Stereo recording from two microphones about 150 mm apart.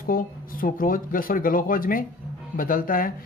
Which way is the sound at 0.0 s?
70° left (ahead or behind).